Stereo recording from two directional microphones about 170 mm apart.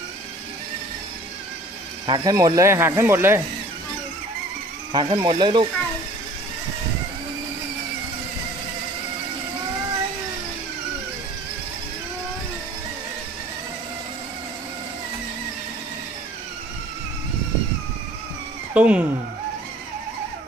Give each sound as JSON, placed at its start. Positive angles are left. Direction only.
{"t": 2.0, "sound": "speech", "side_deg": -25}
{"t": 4.9, "sound": "speech", "side_deg": -25}
{"t": 18.7, "sound": "speech", "side_deg": -5}